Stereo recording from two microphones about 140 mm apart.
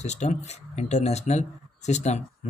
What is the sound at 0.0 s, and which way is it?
Speech, 55° left (ahead or behind).